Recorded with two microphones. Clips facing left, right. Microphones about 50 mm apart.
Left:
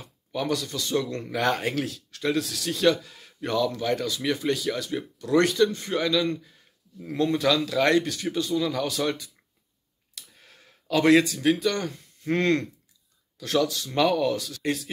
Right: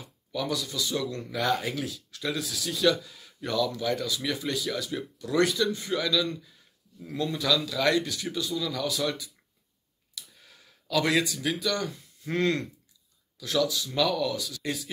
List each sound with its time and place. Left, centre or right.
0.5 s speech: left
3.9 s a man's voice: left
10.1 s clicking: left
11.6 s speech: left